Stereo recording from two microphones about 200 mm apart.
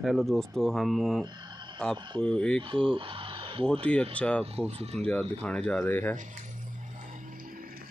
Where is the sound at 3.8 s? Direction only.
5° left (ahead or behind).